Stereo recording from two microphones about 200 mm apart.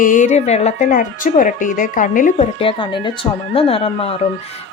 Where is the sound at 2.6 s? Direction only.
25° left (ahead or behind).